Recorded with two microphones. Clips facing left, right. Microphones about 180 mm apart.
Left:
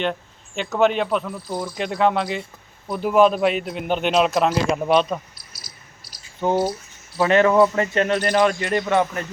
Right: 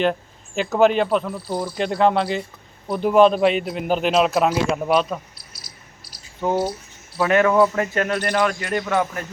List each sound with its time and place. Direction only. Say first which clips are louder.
0.0 s a sound: right 4 dB; centre (ahead or behind)
0.8 s a man's voice: right 2 dB; centre (ahead or behind)
6.4 s a man's voice: left 1 dB; centre (ahead or behind)